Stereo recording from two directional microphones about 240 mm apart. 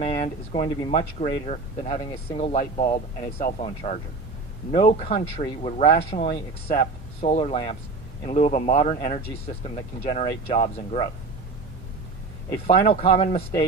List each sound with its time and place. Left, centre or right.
0.0 s a man's voice: left
12.8 s a man's voice: left